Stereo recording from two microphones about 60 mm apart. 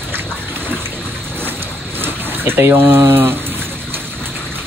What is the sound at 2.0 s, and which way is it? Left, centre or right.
Speech, right.